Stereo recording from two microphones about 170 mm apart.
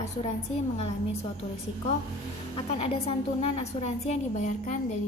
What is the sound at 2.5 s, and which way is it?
A woman's voice, 35° left (ahead or behind).